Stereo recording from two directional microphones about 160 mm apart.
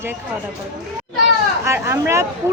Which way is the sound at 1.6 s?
15° right (ahead or behind).